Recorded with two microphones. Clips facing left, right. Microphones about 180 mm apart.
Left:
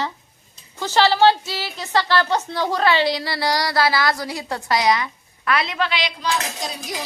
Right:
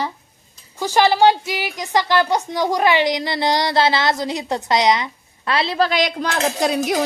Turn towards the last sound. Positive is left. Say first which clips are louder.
# right 6 dB
turn(degrees=-65)  # may be behind; listen again after turning